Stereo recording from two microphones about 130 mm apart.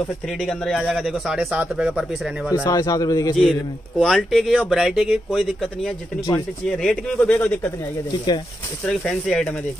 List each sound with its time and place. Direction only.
0.4 s speech: 5° left (ahead or behind)
2.5 s a man's voice: 30° left (ahead or behind)
4.0 s speech: centre (ahead or behind)
8.8 s speech: 5° left (ahead or behind)